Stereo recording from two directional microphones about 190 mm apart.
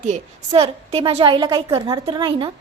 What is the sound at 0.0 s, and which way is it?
A woman's voice, 35° right (ahead or behind).